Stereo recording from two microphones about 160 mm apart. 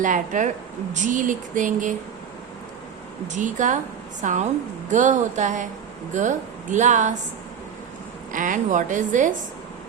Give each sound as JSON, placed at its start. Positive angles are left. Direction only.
{"t": 0.0, "sound": "a woman's voice", "side_deg": -55}
{"t": 3.3, "sound": "a woman's voice", "side_deg": -50}
{"t": 8.3, "sound": "a woman's voice", "side_deg": -55}